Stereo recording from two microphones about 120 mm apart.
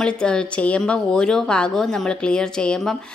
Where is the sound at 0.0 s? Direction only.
5° left (ahead or behind).